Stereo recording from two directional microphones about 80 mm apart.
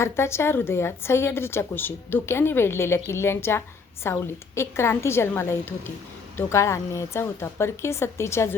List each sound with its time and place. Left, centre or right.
0.0 s a woman's voice: left